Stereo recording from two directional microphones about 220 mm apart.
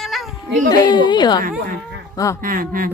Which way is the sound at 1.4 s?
40° right (ahead or behind).